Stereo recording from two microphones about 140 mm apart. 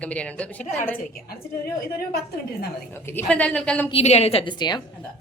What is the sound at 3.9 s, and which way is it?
Speech, 50° left (ahead or behind).